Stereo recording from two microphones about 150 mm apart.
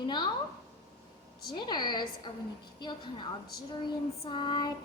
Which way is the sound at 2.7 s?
30° left (ahead or behind).